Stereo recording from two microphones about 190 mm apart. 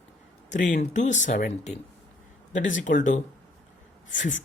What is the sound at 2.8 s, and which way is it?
Speech, 40° left (ahead or behind).